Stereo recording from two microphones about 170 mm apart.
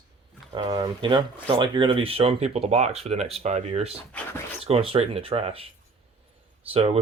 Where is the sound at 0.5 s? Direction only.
25° right (ahead or behind).